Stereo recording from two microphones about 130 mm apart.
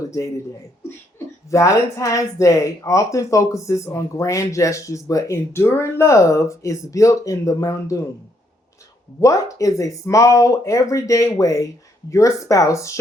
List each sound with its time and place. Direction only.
1.5 s speech: 25° left (ahead or behind)
9.2 s speech: 25° left (ahead or behind)